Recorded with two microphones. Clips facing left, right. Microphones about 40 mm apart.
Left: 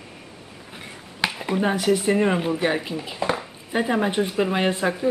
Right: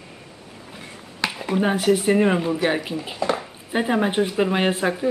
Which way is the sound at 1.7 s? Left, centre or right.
Centre.